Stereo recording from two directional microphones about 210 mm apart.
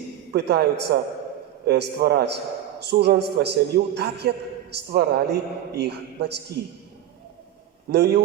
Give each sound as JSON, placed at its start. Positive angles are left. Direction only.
{"t": 0.3, "sound": "a man's voice", "side_deg": -50}
{"t": 7.9, "sound": "a man's voice", "side_deg": -55}